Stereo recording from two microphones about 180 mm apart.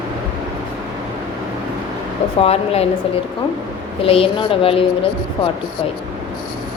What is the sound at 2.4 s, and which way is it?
Speech, 35° left (ahead or behind).